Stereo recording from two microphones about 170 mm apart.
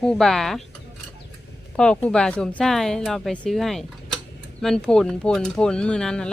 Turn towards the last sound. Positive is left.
turn(degrees=5)  # may be behind; listen again after turning